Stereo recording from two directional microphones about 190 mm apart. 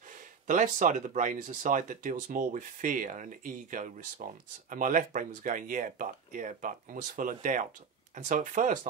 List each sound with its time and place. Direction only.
0.5 s speech: 40° right (ahead or behind)